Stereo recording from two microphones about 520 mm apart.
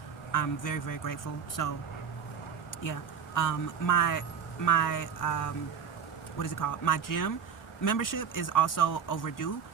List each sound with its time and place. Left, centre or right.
0.3 s speech: left
3.3 s speech: left